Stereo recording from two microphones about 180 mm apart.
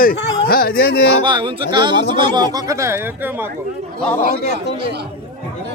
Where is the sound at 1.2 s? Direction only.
25° right (ahead or behind); by 3.5 s 10° right (ahead or behind).